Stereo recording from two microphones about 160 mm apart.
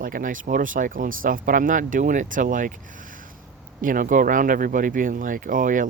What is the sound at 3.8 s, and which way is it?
Speech, 60° right (ahead or behind).